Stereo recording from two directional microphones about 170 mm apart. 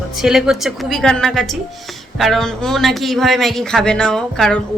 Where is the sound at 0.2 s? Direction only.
5° right (ahead or behind).